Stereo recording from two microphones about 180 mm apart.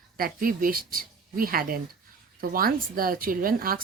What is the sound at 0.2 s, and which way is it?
Speech, 50° right (ahead or behind).